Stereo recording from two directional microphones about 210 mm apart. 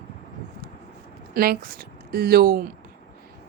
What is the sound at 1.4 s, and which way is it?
Speech, 45° right (ahead or behind).